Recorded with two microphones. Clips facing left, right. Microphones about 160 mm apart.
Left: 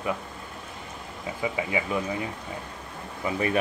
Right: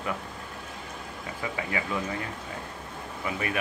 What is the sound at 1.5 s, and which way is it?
Speech, 20° left (ahead or behind).